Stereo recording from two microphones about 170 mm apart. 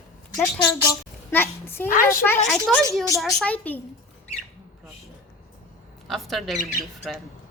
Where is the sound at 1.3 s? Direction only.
15° left (ahead or behind).